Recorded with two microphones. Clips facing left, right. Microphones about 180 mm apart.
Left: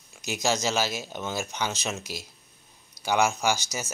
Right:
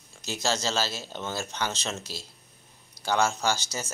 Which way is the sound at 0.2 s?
15° left (ahead or behind).